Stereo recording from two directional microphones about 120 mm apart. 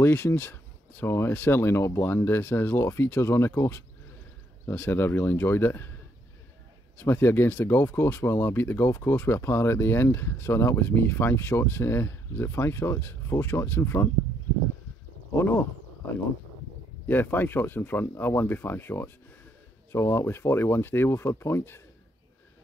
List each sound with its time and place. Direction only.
0.0 s speech: 20° left (ahead or behind)
7.0 s speech: 20° left (ahead or behind)
15.3 s speech: 20° left (ahead or behind)
17.1 s speech: 15° left (ahead or behind)